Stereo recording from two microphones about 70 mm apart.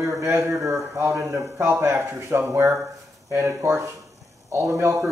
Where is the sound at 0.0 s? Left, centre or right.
Right.